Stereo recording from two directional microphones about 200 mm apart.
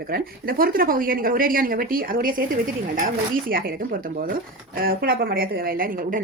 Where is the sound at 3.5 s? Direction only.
45° right (ahead or behind).